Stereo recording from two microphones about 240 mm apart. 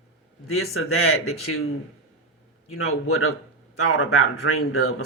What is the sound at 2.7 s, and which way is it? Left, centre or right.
Speech, left.